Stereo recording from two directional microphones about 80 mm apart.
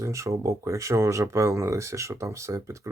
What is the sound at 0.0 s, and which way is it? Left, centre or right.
Speech, right.